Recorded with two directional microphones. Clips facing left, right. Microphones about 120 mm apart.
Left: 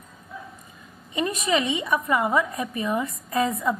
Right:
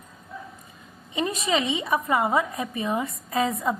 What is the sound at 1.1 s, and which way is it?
A woman's voice, 25° right (ahead or behind).